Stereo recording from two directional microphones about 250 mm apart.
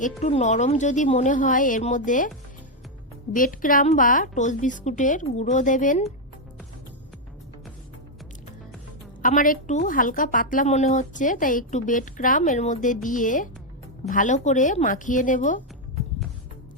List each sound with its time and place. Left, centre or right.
0.2 s a woman's voice: left
3.3 s a woman's voice: left
9.2 s a woman's voice: left